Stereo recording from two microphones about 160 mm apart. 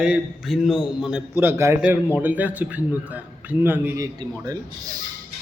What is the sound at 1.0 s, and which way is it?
A man's voice, 10° right (ahead or behind).